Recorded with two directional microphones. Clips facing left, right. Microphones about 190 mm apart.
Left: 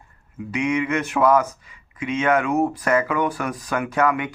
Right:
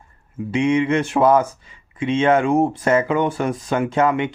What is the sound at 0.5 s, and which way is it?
Speech, 30° right (ahead or behind).